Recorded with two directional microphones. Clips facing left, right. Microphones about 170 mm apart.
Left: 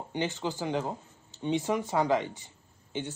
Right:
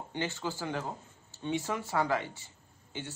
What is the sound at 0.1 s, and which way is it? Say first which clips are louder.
Speech: left 4 dB; 15° left (ahead or behind).